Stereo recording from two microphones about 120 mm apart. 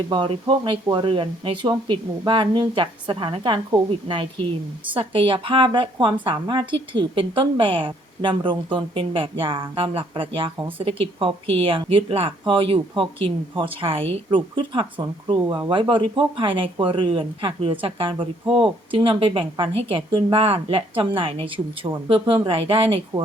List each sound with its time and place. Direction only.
0.1 s a woman's voice: 45° right (ahead or behind)